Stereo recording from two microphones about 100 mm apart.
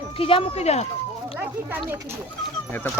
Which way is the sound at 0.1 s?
65° left (ahead or behind).